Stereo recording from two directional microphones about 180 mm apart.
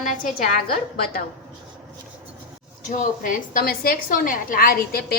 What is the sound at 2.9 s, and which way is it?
A woman's voice, 45° left (ahead or behind).